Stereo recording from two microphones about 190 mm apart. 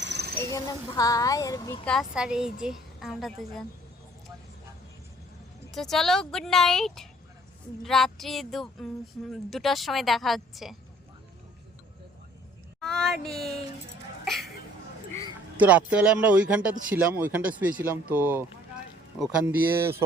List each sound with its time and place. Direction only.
0.0 s snake: 65° right (ahead or behind)
0.5 s speech: 20° left (ahead or behind)
1.8 s a woman's voice: centre (ahead or behind)
5.7 s a woman's voice: centre (ahead or behind)
12.8 s speech: centre (ahead or behind)
15.5 s speech: 5° right (ahead or behind)